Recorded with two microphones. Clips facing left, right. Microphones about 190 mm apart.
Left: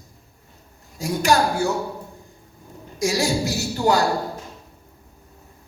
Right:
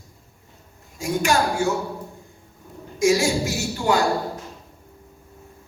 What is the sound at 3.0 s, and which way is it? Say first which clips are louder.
A woman's voice: right 3 dB; 35° left (ahead or behind).